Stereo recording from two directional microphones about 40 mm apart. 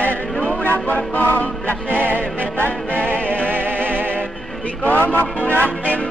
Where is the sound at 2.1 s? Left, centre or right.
Left.